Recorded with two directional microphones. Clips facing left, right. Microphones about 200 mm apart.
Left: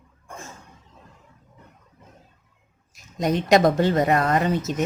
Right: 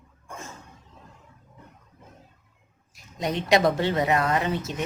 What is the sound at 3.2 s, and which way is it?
Speech, 45° left (ahead or behind).